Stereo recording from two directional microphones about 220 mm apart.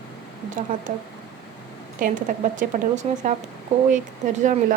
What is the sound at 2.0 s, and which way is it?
Speech, 35° right (ahead or behind).